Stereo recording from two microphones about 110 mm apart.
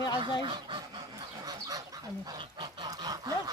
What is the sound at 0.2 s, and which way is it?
Speech, 50° right (ahead or behind).